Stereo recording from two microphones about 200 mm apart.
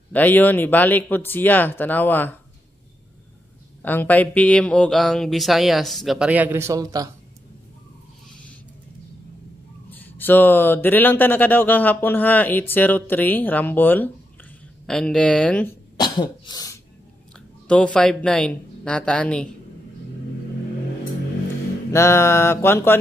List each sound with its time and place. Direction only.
0.1 s speech: 10° left (ahead or behind)
3.8 s speech: 10° left (ahead or behind); by 7.1 s 20° right (ahead or behind)
9.8 s speech: 10° left (ahead or behind)
16.0 s cough: 20° left (ahead or behind)
17.6 s speech: 5° left (ahead or behind)
21.9 s speech: 15° left (ahead or behind)